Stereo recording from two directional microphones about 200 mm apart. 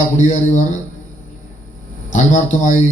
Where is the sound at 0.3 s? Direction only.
35° left (ahead or behind).